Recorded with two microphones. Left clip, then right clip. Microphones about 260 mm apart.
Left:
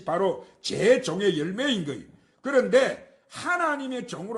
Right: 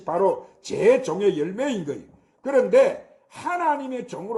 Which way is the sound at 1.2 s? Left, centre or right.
Left.